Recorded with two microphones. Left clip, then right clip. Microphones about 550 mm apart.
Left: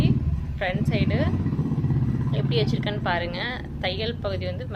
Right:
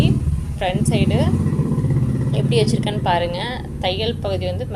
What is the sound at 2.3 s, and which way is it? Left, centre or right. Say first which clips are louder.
A woman's voice: right 7 dB; left.